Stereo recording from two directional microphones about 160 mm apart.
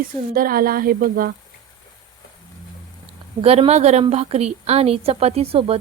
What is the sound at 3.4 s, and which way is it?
A woman's voice, 40° right (ahead or behind).